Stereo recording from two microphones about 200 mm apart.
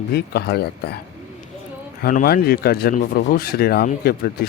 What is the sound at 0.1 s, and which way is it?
Speech, 50° left (ahead or behind).